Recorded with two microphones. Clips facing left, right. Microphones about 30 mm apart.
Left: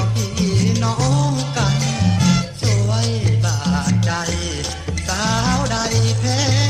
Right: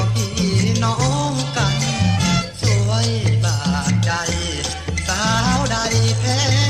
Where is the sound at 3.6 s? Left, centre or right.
Centre.